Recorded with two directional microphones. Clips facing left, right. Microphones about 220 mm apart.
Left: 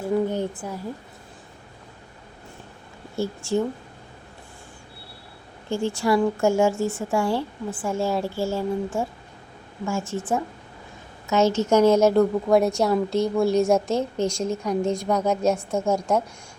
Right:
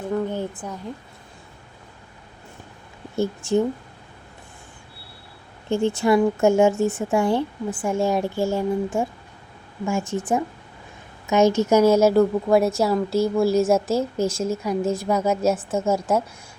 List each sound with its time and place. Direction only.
0.0 s a sound: 10° left (ahead or behind)
3.2 s speech: 20° right (ahead or behind)
5.6 s a woman's voice: 20° right (ahead or behind); by 16.2 s 5° right (ahead or behind)